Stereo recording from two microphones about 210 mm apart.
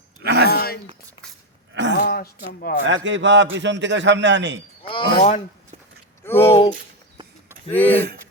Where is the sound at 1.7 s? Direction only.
60° right (ahead or behind).